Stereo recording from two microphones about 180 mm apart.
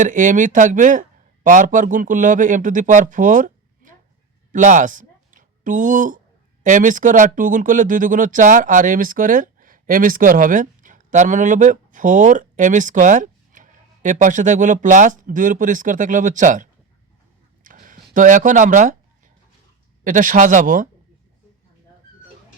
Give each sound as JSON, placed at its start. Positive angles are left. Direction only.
{"t": 0.0, "sound": "speech", "side_deg": -45}
{"t": 17.6, "sound": "a sound", "side_deg": -50}
{"t": 20.1, "sound": "speech", "side_deg": -45}